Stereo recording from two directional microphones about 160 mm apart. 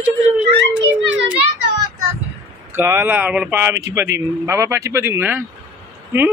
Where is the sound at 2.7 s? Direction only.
15° right (ahead or behind).